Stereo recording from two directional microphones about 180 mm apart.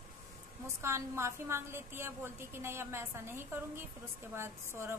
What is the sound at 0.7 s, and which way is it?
A woman's voice, 15° right (ahead or behind).